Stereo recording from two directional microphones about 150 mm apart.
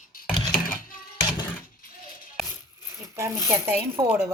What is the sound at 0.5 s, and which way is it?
Mechanisms, 70° left (ahead or behind).